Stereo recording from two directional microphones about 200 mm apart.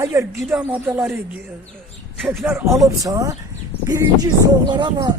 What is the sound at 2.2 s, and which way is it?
A man's voice, 5° right (ahead or behind).